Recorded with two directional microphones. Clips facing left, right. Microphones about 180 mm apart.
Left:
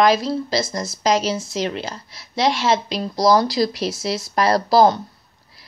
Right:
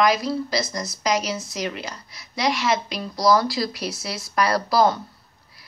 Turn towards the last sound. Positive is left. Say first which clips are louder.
# left 5 dB
turn(degrees=25)  # may be behind; listen again after turning